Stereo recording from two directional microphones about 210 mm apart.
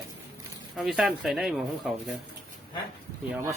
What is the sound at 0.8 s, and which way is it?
Speech, centre (ahead or behind).